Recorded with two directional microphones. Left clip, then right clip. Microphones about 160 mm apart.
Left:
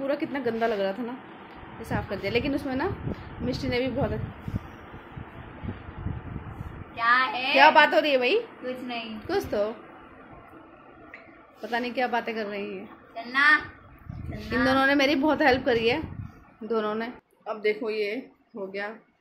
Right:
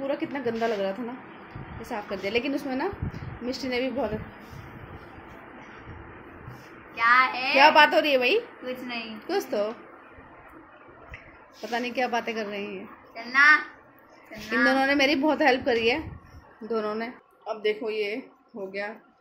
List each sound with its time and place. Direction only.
0.0 s a woman's voice: centre (ahead or behind)
7.0 s a child's voice: 20° left (ahead or behind)
7.5 s a woman's voice: 5° right (ahead or behind)
11.7 s a woman's voice: 5° right (ahead or behind)
13.1 s a child's voice: 10° left (ahead or behind)
14.5 s a woman's voice: centre (ahead or behind)